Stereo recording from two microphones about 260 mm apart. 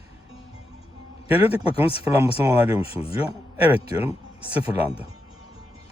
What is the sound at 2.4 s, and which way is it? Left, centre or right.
Speech, centre.